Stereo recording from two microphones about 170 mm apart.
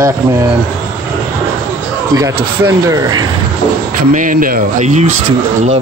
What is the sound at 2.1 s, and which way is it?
A man's voice, 20° right (ahead or behind).